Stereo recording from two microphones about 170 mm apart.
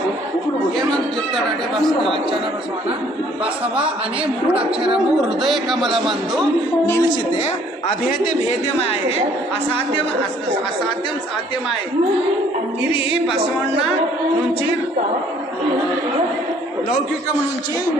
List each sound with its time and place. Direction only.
1.7 s speech: centre (ahead or behind)
4.9 s speech: 5° right (ahead or behind)
6.8 s a woman's voice: 15° left (ahead or behind)
8.4 s a woman's voice: 35° left (ahead or behind)